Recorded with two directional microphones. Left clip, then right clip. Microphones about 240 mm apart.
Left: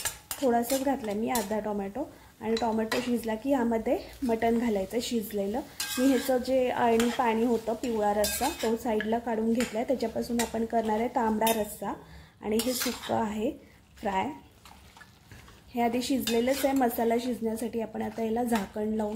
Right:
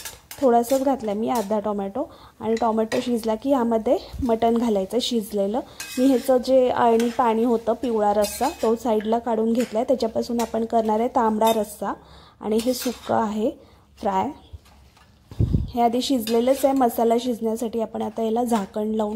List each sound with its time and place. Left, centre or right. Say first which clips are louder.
0.5 s speech: right 8 dB; right
13.1 s speech: right 9 dB; right
15.7 s speech: right 7 dB; right